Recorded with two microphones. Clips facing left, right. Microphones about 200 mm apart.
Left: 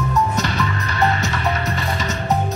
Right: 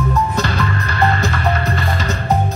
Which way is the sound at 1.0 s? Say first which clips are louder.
Right 2 dB; 35° right (ahead or behind).